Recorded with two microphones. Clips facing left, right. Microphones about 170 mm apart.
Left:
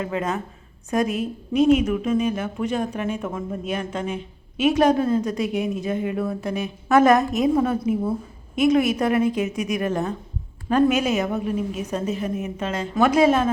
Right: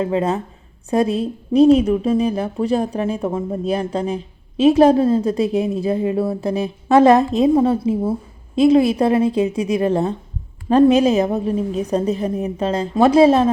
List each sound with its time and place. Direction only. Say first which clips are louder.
0.0 s a woman's voice: right 6 dB; 30° right (ahead or behind)